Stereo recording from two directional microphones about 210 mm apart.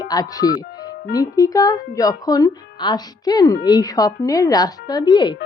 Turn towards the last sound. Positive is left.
turn(degrees=20)  # may be behind; listen again after turning